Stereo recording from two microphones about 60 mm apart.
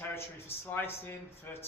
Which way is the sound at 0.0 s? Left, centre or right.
Left.